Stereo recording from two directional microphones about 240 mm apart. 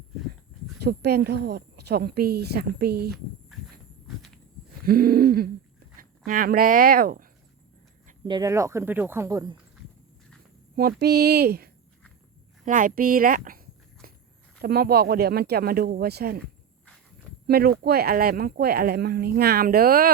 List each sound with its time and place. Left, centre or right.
0.8 s speech: right
4.9 s speech: right
8.2 s speech: centre
10.8 s speech: right
14.6 s speech: right
17.4 s speech: right